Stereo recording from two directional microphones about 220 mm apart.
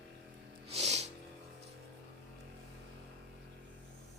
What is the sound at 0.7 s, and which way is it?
Music, 30° right (ahead or behind).